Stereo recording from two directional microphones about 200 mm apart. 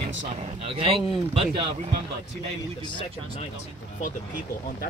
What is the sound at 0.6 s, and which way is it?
Speech, 30° right (ahead or behind).